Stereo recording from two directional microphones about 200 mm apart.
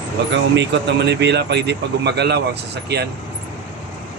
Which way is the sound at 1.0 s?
55° right (ahead or behind).